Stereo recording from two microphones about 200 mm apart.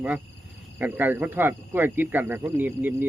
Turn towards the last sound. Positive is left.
turn(degrees=-10)  # may be behind; listen again after turning